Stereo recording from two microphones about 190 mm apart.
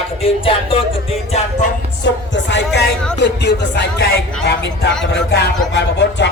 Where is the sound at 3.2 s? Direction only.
65° left (ahead or behind).